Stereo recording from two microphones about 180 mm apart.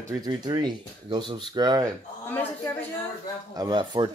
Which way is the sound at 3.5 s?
25° right (ahead or behind).